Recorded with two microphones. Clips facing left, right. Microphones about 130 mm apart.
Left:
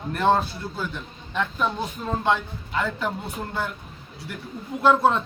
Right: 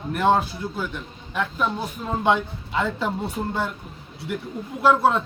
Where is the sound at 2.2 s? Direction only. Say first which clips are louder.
Right 4 dB; 15° right (ahead or behind).